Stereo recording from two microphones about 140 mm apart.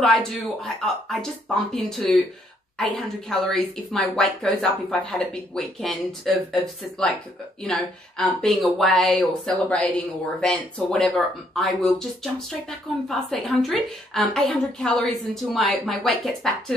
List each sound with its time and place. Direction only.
0.0 s a woman's voice: centre (ahead or behind)